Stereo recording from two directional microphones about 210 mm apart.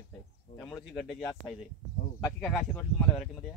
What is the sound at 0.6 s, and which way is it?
Speech, 5° left (ahead or behind).